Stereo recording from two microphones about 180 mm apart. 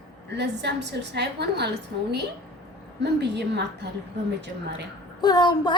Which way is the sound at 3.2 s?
70° right (ahead or behind).